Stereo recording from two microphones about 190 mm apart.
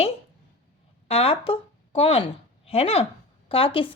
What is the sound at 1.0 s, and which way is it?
Speech, 30° left (ahead or behind).